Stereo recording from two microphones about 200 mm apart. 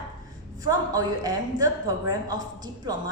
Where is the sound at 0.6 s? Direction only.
20° right (ahead or behind).